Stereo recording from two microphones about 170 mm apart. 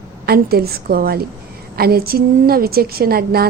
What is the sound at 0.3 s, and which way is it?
A woman's voice, 65° right (ahead or behind).